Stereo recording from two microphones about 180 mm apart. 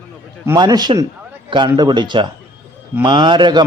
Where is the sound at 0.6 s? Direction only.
20° right (ahead or behind).